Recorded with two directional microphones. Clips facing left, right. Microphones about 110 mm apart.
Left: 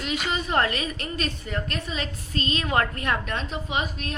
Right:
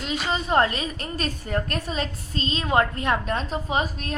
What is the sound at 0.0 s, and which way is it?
A woman's voice, 30° right (ahead or behind).